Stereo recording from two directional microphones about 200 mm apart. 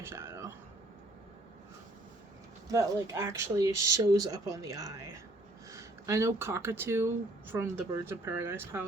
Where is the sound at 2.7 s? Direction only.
15° right (ahead or behind).